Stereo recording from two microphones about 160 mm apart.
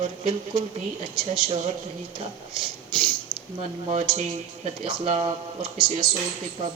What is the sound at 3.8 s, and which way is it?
Speech, 45° right (ahead or behind).